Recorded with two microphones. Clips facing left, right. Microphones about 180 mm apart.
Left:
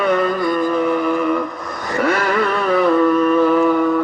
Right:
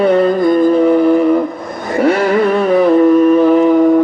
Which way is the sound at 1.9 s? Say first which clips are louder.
Right 6 dB; 25° right (ahead or behind).